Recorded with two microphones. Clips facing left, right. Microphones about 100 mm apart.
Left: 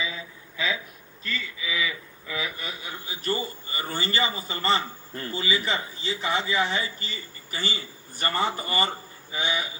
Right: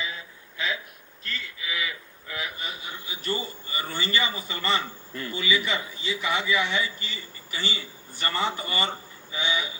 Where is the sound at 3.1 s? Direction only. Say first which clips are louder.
Left 2 dB; 35° left (ahead or behind).